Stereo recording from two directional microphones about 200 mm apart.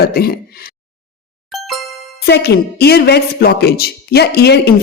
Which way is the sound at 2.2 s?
55° left (ahead or behind).